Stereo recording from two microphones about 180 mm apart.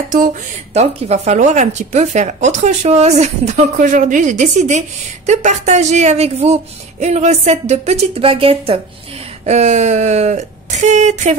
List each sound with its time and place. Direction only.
0.7 s speech: 35° right (ahead or behind)